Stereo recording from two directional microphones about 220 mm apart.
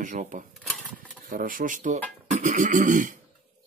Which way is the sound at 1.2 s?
40° right (ahead or behind).